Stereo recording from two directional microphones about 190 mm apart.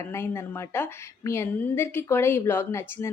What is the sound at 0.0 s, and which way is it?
A woman's voice, 15° left (ahead or behind).